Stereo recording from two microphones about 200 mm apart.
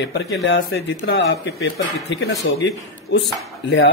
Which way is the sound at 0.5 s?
65° left (ahead or behind).